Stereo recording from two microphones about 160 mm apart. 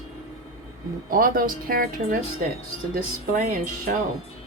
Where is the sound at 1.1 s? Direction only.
65° right (ahead or behind).